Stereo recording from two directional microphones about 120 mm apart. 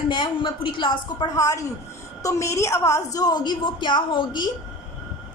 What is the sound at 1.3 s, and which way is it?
A woman's voice, 25° left (ahead or behind).